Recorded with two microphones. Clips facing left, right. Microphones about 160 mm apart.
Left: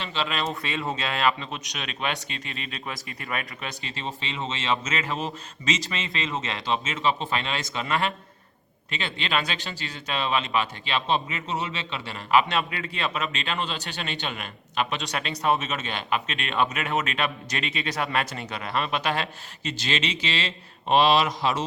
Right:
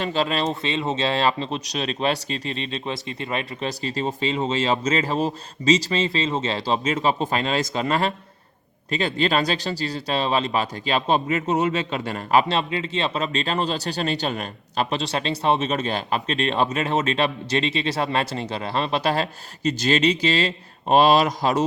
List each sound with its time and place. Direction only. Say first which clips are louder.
0.0 s speech: right 6 dB; 40° right (ahead or behind)